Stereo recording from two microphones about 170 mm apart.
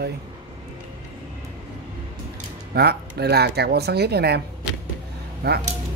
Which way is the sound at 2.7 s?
70° right (ahead or behind).